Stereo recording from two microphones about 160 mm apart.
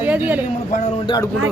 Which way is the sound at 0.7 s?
55° left (ahead or behind).